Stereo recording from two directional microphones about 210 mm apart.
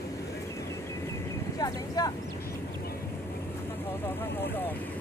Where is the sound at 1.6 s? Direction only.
15° left (ahead or behind).